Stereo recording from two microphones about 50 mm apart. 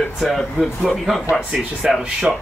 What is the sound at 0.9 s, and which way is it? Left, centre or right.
Speech, centre.